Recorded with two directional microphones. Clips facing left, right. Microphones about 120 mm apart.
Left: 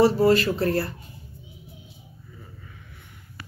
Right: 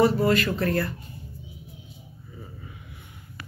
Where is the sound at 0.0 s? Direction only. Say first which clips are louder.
Left 3 dB; 30° left (ahead or behind).